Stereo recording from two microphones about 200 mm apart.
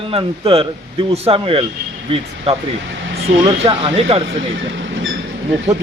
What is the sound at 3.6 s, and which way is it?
Speech, 30° right (ahead or behind).